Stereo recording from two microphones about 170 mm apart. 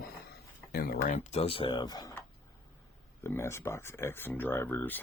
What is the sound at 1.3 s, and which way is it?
Speech, 35° left (ahead or behind).